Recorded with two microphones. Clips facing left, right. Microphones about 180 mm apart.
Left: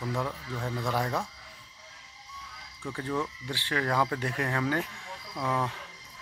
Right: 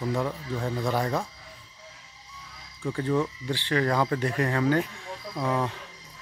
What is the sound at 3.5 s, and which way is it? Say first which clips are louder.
Speech: right 4 dB; 5° left (ahead or behind).